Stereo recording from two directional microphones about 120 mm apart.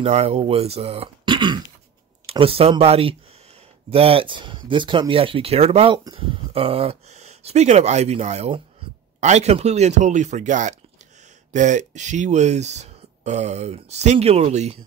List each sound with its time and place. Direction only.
0.0 s speech: 60° right (ahead or behind)
1.2 s throat clearing: 40° right (ahead or behind)
2.3 s speech: 50° right (ahead or behind); by 14.8 s 65° right (ahead or behind)